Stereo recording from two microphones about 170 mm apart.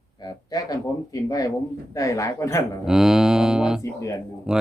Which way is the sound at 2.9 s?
Centre (ahead or behind).